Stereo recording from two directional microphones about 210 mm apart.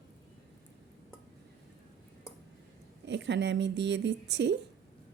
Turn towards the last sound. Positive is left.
turn(degrees=-55)  # may be behind; listen again after turning